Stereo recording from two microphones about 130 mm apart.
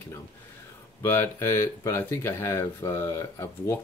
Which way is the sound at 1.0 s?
20° left (ahead or behind).